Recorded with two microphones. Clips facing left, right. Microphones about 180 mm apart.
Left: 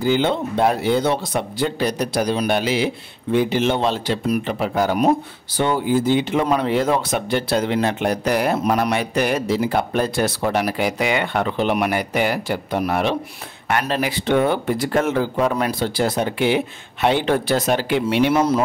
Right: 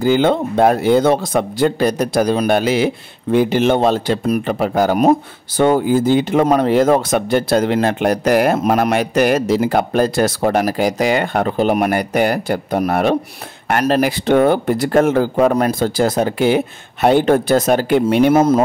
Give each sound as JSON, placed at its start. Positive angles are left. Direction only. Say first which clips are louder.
{"t": 0.0, "sound": "a man's voice", "louder": "right 5 dB", "side_deg": -50}